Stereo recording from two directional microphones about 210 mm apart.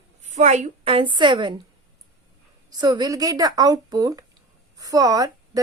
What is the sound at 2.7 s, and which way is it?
A woman's voice, 20° right (ahead or behind).